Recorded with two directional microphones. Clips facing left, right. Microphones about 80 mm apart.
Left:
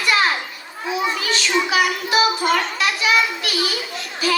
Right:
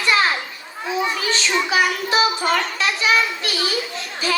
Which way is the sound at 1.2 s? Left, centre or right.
Right.